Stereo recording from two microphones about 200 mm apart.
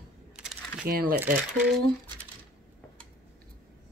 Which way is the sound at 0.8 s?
45° right (ahead or behind).